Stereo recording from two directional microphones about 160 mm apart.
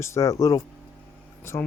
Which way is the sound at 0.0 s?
20° left (ahead or behind).